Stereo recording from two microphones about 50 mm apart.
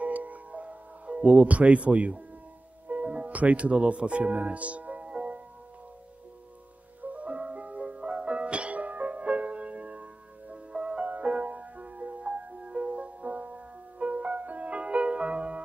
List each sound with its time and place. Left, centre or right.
0.0 s music: right
2.9 s speech: right
5.1 s music: right
7.0 s music: right